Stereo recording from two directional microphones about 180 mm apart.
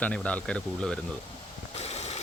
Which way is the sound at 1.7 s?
35° left (ahead or behind).